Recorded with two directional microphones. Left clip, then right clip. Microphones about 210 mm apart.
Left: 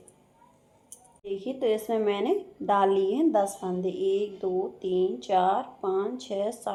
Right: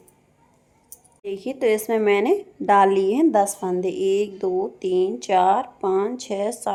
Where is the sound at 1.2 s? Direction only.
50° right (ahead or behind).